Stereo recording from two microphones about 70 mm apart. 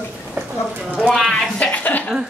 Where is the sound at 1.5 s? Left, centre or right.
Centre.